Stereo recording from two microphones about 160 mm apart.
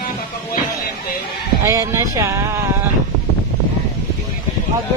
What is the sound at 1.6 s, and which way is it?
Speech, 20° right (ahead or behind).